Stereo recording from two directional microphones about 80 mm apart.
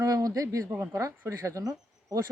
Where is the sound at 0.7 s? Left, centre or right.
Right.